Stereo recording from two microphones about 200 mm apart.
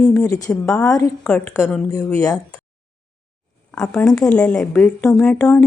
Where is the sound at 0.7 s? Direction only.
5° left (ahead or behind).